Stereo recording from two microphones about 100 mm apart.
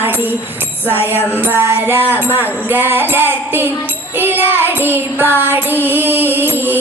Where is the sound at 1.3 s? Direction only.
20° right (ahead or behind).